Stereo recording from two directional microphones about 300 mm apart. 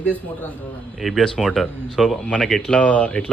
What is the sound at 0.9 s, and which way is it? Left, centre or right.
Speech, centre.